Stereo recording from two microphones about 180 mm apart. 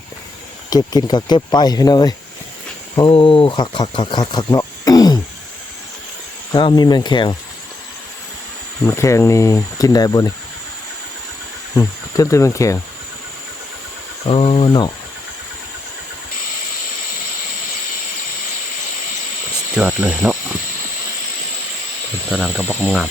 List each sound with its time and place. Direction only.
0.7 s speech: 20° left (ahead or behind)
6.5 s speech: 25° left (ahead or behind)
8.9 s speech: 15° left (ahead or behind)
11.8 s speech: 20° left (ahead or behind)
14.3 s speech: 35° left (ahead or behind)
19.7 s speech: 10° right (ahead or behind)
22.3 s speech: centre (ahead or behind)